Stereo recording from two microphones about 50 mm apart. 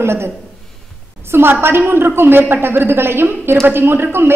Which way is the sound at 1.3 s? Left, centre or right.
Right.